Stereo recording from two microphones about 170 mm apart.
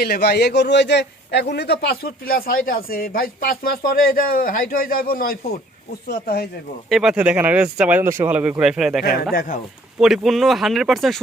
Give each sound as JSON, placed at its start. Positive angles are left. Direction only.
{"t": 0.0, "sound": "a man's voice", "side_deg": 70}
{"t": 6.9, "sound": "speech", "side_deg": -5}
{"t": 9.3, "sound": "speech", "side_deg": 55}
{"t": 10.0, "sound": "speech", "side_deg": 0}